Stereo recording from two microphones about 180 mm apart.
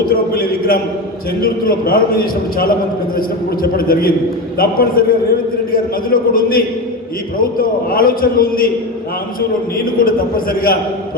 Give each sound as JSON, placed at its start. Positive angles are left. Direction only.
{"t": 0.0, "sound": "a man's voice", "side_deg": 55}
{"t": 9.7, "sound": "a man's voice", "side_deg": 55}